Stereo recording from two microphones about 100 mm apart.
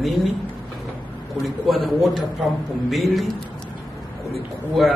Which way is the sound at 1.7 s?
Centre (ahead or behind).